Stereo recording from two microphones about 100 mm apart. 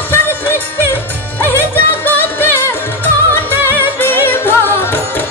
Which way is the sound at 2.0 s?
20° left (ahead or behind).